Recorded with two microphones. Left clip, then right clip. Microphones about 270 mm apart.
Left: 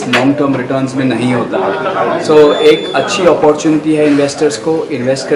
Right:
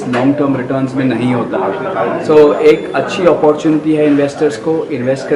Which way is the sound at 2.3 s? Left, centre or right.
Right.